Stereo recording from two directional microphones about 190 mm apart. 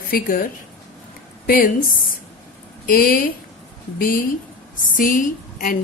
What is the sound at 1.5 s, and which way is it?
A woman's voice, 45° left (ahead or behind).